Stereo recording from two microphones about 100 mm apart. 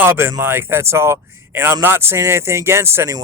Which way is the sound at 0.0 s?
20° right (ahead or behind).